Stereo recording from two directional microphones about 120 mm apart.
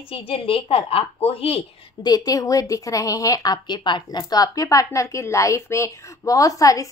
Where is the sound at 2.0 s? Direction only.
30° left (ahead or behind).